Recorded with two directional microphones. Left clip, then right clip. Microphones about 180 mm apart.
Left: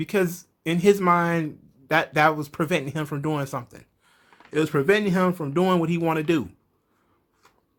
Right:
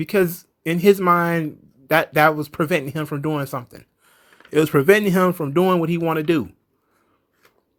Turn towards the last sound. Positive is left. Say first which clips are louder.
# right 3 dB
turn(degrees=-25)  # may be behind; listen again after turning